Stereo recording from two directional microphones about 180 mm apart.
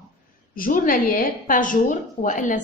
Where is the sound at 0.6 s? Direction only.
50° left (ahead or behind).